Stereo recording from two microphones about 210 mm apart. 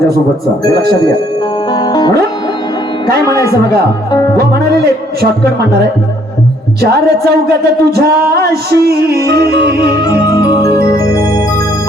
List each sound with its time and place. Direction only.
1.7 s music: 20° left (ahead or behind)
3.2 s speech: 15° left (ahead or behind)
3.5 s music: 45° right (ahead or behind)
6.8 s music: 50° right (ahead or behind)
10.3 s music: 20° left (ahead or behind)
10.8 s music: 45° right (ahead or behind)